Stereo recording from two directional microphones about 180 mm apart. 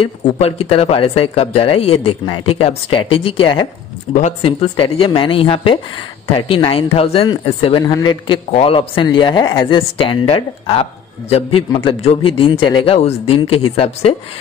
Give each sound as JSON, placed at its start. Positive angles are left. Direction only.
{"t": 0.0, "sound": "speech", "side_deg": 35}